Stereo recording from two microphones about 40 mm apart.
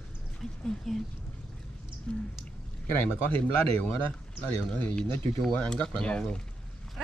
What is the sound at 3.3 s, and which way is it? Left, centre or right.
Speech, left.